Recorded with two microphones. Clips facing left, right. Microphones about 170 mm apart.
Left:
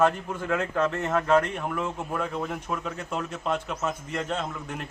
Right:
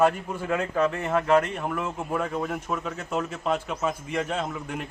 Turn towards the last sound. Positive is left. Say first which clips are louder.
# right 2 dB
turn(degrees=-5)  # may be behind; listen again after turning